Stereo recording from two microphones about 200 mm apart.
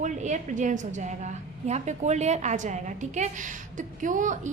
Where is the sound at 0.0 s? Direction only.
35° right (ahead or behind).